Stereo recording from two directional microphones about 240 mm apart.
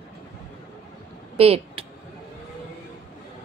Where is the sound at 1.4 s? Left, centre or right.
Right.